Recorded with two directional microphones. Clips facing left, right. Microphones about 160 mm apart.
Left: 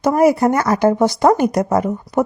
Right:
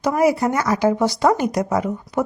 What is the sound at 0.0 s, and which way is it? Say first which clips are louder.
Speech: left 4 dB; 50° left (ahead or behind).